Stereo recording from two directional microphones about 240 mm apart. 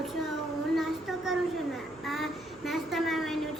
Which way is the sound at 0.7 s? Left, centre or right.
Centre.